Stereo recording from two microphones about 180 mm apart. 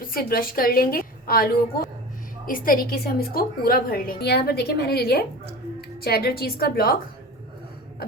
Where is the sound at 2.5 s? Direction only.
55° left (ahead or behind).